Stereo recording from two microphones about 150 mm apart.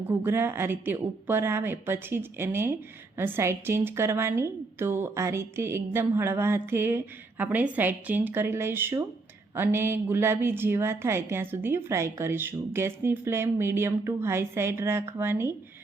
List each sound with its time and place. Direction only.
0.1 s a woman's voice: 15° right (ahead or behind)